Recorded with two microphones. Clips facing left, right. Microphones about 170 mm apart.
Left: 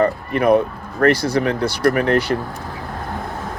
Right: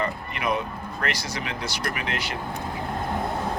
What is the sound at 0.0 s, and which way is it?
Speech, 55° left (ahead or behind).